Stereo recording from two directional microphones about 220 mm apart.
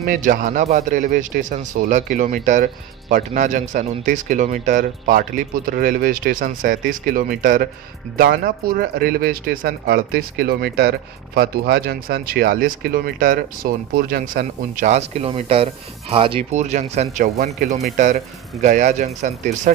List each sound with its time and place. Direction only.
0.0 s speech: 40° right (ahead or behind)